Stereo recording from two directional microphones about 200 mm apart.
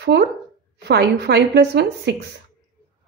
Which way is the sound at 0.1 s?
60° right (ahead or behind).